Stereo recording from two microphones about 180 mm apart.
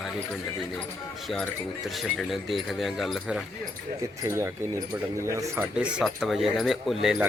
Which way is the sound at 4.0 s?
15° right (ahead or behind).